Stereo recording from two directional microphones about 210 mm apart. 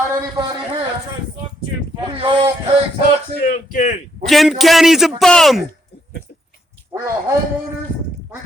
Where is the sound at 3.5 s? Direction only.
40° left (ahead or behind).